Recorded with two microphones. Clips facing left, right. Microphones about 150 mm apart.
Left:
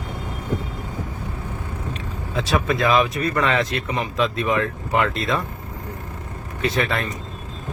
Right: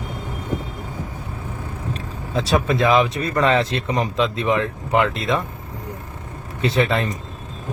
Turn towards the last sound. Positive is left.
turn(degrees=-25)  # may be behind; listen again after turning